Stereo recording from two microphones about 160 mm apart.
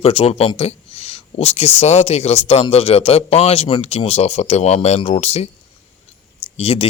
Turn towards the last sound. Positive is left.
turn(degrees=40)  # may be behind; listen again after turning